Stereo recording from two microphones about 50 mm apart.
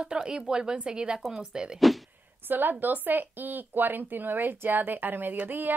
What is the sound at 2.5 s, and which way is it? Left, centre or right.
Speech, right.